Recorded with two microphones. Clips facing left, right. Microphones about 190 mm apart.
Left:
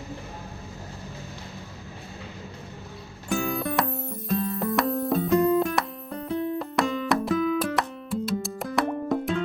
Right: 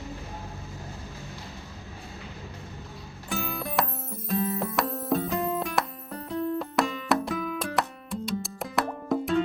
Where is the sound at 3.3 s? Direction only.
Centre (ahead or behind).